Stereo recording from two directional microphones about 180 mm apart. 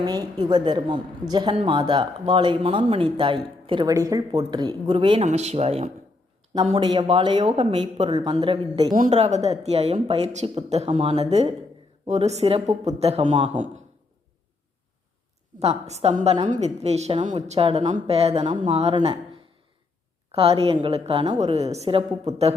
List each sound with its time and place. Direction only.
0.0 s speech: 20° right (ahead or behind)
9.0 s speech: 40° right (ahead or behind)
15.5 s speech: 35° right (ahead or behind)
20.3 s speech: 35° right (ahead or behind)